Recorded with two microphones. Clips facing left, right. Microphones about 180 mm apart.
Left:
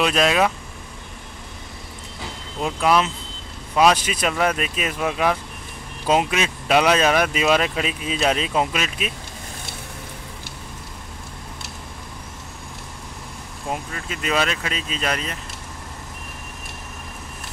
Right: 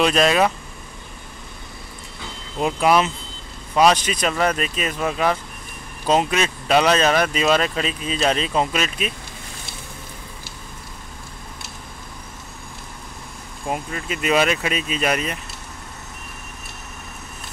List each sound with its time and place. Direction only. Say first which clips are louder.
0.0 s speech: right 2 dB; centre (ahead or behind)
2.6 s speech: right 2 dB; 5° right (ahead or behind)
3.7 s speech: right 1 dB; 5° left (ahead or behind)
13.7 s speech: right 3 dB; 10° right (ahead or behind)